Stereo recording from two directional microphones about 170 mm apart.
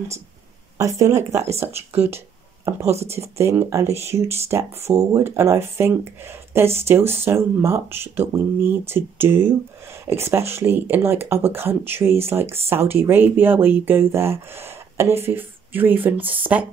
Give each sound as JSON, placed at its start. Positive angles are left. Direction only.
{"t": 0.7, "sound": "speech", "side_deg": -20}
{"t": 2.9, "sound": "speech", "side_deg": -40}
{"t": 3.2, "sound": "speech", "side_deg": -15}